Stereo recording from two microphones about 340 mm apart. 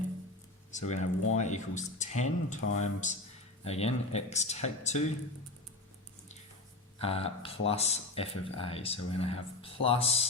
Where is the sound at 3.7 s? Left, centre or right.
Centre.